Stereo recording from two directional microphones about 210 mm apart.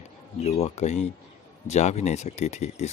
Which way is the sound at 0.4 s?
30° left (ahead or behind).